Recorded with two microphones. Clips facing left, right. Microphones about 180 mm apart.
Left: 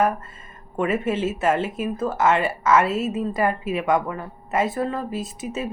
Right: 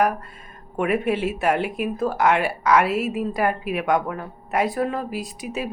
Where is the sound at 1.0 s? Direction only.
65° right (ahead or behind).